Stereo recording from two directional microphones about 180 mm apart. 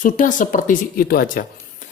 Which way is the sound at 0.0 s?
45° left (ahead or behind).